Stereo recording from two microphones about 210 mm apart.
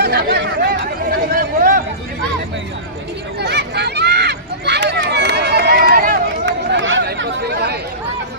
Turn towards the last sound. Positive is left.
turn(degrees=-50)  # may be behind; listen again after turning